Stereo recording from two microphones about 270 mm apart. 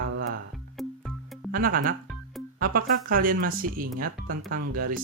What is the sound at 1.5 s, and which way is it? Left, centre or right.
Speech, right.